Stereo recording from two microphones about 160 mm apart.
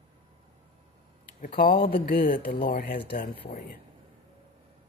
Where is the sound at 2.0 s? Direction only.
80° left; by 3.0 s 65° left (ahead or behind).